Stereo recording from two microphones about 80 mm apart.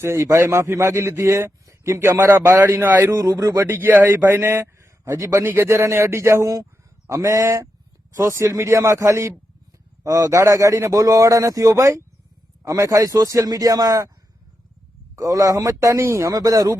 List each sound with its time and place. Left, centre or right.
0.0 s a man's voice: right
3.1 s speech: right
5.0 s a man's voice: right
15.1 s a man's voice: right